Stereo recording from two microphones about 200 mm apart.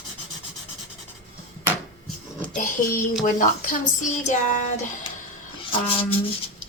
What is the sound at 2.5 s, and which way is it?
Speech, 40° left (ahead or behind).